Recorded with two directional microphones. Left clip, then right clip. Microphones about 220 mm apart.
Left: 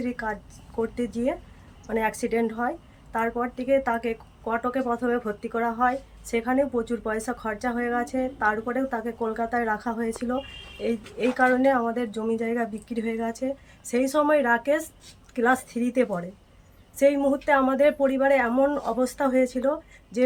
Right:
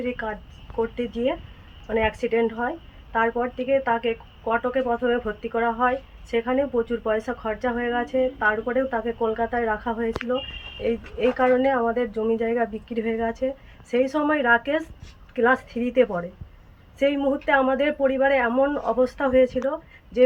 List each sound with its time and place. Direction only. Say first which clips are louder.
0.0 s a woman's voice: right 2 dB; 15° left (ahead or behind)